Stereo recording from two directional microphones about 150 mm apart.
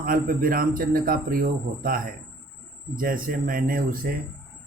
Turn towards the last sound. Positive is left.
turn(degrees=-80)